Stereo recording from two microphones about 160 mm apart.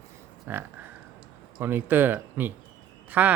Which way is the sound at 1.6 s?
15° right (ahead or behind).